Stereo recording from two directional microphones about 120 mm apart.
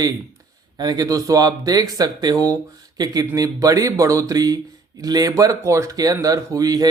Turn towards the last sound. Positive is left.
turn(degrees=-30)  # may be behind; listen again after turning